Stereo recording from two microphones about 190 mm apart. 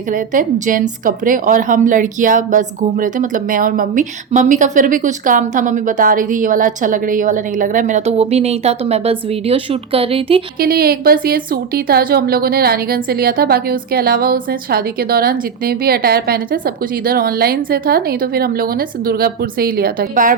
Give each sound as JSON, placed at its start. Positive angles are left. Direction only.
{"t": 0.1, "sound": "a woman's voice", "side_deg": -45}
{"t": 10.6, "sound": "a woman's voice", "side_deg": -50}